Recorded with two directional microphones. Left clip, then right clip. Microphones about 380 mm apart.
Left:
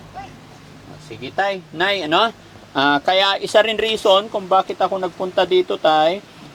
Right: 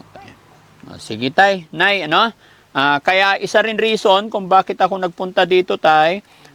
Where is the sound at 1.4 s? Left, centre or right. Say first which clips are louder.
Right 7 dB; right.